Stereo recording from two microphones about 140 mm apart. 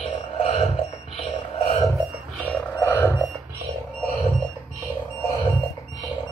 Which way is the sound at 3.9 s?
5° left (ahead or behind).